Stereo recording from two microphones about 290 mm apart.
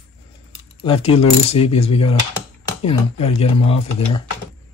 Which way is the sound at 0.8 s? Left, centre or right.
Centre.